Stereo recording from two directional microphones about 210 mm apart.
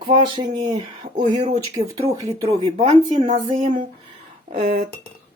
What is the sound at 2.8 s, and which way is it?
Speech, 30° right (ahead or behind).